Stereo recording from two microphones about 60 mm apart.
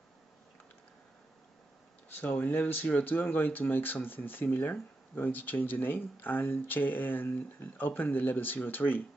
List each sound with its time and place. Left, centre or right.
2.1 s speech: left